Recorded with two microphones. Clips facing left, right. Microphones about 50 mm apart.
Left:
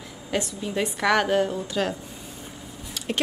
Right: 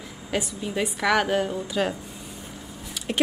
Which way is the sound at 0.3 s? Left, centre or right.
Centre.